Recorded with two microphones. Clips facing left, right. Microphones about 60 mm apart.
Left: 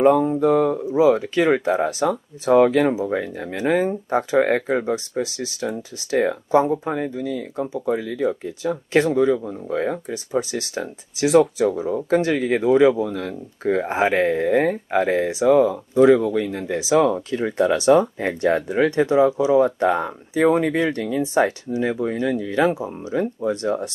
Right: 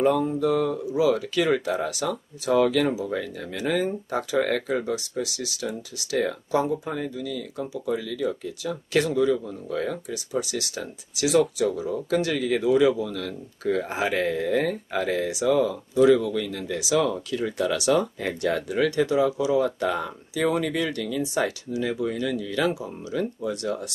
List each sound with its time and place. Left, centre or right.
0.0 s speech: left